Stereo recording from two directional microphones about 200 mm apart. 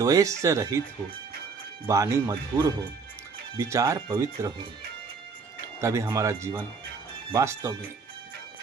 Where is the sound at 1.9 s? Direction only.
15° right (ahead or behind).